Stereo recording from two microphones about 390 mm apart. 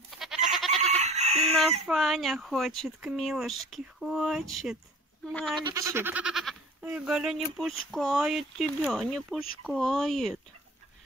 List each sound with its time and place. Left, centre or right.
0.5 s goat: centre
0.7 s fowl: centre
1.9 s speech: centre
5.6 s speech: centre